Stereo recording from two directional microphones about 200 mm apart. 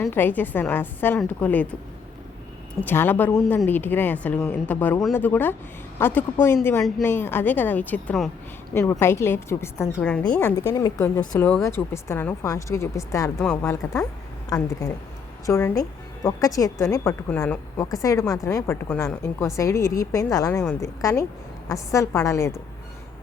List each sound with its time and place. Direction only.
0.0 s a woman's voice: 10° left (ahead or behind)
2.8 s a woman's voice: 10° left (ahead or behind)